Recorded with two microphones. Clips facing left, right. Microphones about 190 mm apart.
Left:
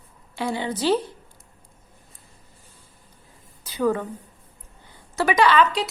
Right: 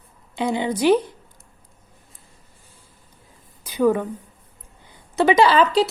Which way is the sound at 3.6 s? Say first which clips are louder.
Right 4 dB; 15° right (ahead or behind).